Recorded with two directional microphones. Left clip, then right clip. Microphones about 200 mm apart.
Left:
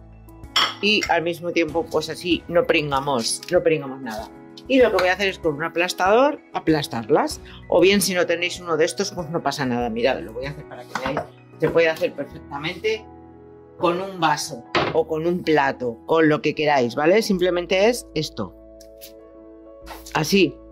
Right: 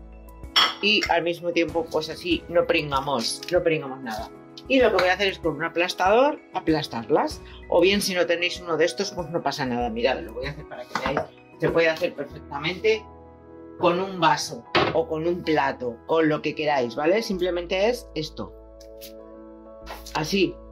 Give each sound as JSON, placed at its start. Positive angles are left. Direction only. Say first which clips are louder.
{"t": 0.7, "sound": "speech", "louder": "left 2 dB", "side_deg": 45}
{"t": 11.6, "sound": "speech", "louder": "left 3 dB", "side_deg": 50}
{"t": 13.7, "sound": "speech", "louder": "even", "side_deg": 60}
{"t": 20.1, "sound": "speech", "louder": "left 5 dB", "side_deg": 55}